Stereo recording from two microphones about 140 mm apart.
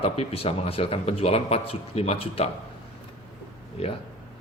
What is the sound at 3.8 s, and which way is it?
Speech, 45° left (ahead or behind).